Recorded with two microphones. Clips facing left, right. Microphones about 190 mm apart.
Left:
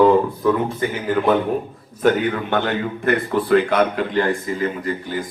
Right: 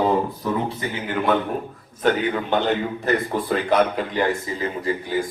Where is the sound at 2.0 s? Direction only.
50° left (ahead or behind).